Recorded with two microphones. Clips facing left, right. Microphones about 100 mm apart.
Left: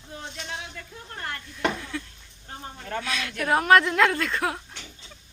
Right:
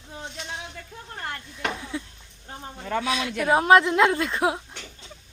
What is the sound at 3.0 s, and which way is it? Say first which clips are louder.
Speech: right 4 dB; 20° right (ahead or behind).